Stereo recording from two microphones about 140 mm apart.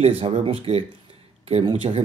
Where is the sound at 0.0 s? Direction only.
45° right (ahead or behind).